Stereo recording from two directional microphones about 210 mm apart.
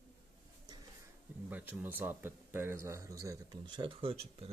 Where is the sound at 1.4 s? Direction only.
10° right (ahead or behind).